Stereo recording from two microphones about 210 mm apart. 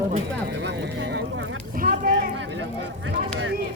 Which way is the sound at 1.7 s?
45° right (ahead or behind).